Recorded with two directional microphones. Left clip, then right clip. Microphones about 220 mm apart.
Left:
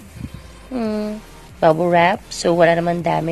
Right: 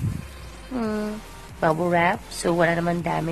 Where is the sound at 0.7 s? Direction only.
Centre (ahead or behind).